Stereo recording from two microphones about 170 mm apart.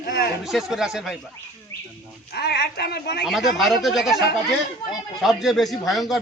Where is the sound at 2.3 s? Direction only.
70° left (ahead or behind).